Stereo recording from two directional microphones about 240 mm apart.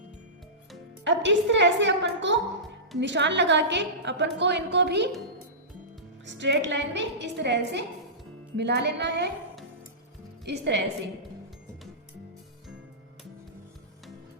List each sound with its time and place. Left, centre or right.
1.0 s a woman's voice: right
6.2 s a woman's voice: right
10.4 s a woman's voice: right